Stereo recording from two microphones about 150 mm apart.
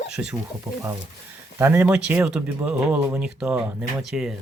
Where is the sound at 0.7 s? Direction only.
20° right (ahead or behind); by 4.3 s 5° right (ahead or behind).